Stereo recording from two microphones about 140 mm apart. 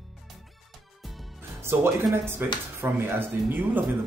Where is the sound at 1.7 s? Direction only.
15° right (ahead or behind).